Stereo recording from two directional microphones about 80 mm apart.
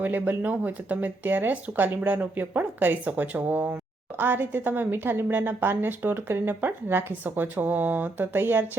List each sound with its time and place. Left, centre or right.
0.0 s a woman's voice: right